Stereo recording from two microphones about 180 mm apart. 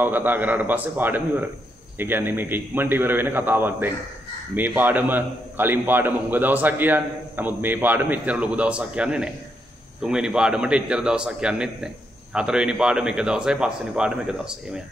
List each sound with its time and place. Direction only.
0.0 s a man's voice: 10° right (ahead or behind)